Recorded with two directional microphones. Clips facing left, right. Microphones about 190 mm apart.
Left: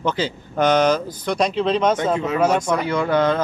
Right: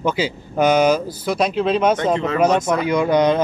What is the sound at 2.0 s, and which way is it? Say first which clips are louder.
Speech: right 1 dB; 5° left (ahead or behind).